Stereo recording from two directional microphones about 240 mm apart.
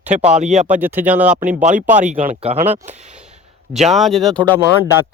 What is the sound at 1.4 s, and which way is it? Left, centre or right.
Speech, right.